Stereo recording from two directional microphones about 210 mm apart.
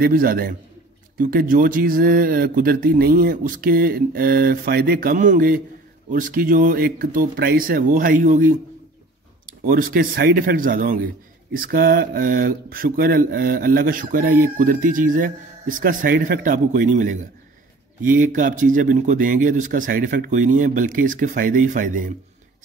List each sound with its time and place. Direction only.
0.0 s speech: 45° right (ahead or behind)
9.7 s speech: 45° right (ahead or behind)